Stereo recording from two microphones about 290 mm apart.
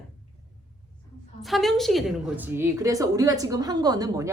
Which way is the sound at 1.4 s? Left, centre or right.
Centre.